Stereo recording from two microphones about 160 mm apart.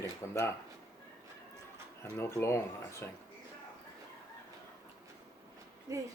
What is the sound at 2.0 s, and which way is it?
Speech, 15° left (ahead or behind).